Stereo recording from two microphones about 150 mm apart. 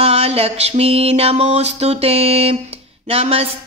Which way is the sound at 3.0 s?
40° right (ahead or behind).